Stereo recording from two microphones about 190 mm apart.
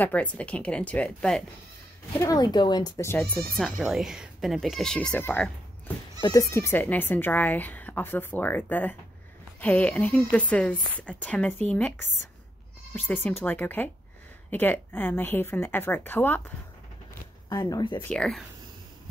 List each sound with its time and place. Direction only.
0.0 s speech: 5° left (ahead or behind)
2.1 s speech: 20° left (ahead or behind)
3.5 s speech: centre (ahead or behind); by 18.0 s 25° left (ahead or behind)
18.0 s speech: 5° left (ahead or behind)